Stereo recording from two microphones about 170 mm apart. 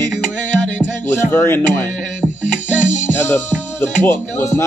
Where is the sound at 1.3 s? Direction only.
15° left (ahead or behind).